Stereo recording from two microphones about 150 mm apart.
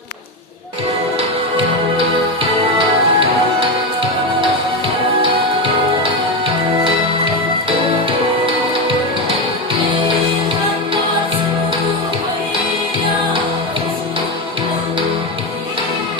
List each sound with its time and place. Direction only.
2.0 s music: 35° right (ahead or behind)